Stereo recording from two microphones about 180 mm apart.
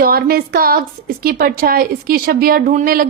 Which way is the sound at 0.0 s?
55° right (ahead or behind).